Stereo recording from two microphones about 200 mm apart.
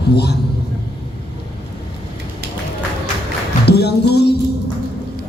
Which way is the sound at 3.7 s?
55° left (ahead or behind).